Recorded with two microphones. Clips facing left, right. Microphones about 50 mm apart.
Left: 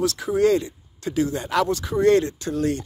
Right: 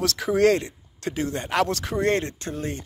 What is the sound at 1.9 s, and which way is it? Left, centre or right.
Speech, right.